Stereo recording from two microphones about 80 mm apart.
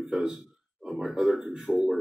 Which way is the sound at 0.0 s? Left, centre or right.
Centre.